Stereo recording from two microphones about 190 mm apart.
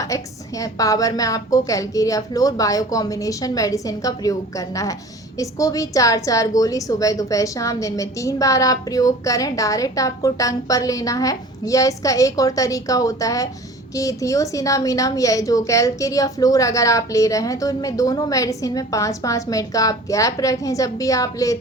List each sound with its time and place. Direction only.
0.0 s a woman's voice: 15° left (ahead or behind)